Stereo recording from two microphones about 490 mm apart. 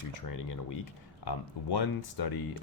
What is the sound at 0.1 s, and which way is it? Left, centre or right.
Speech, left.